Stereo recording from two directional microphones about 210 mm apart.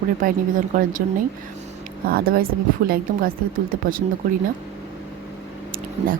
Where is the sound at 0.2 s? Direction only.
40° right (ahead or behind).